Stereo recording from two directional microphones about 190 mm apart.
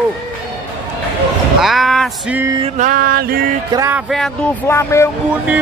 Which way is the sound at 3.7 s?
15° right (ahead or behind).